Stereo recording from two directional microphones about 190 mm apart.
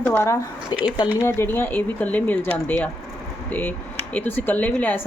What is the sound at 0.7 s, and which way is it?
Speech, 25° left (ahead or behind).